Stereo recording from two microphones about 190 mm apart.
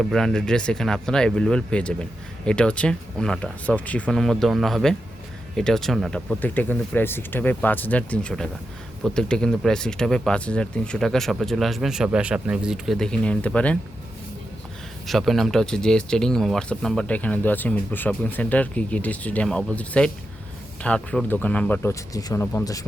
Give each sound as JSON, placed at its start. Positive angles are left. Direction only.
{"t": 0.0, "sound": "speech", "side_deg": 0}
{"t": 15.0, "sound": "speech", "side_deg": 0}